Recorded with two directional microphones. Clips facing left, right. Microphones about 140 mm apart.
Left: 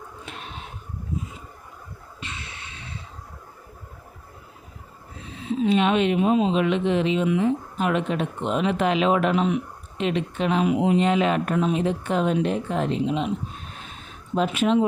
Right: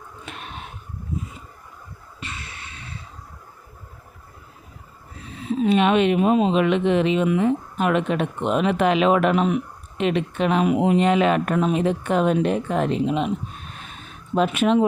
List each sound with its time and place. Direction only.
2.2 s music: 50° right (ahead or behind)
5.6 s speech: 60° right (ahead or behind)
14.3 s speech: 60° right (ahead or behind)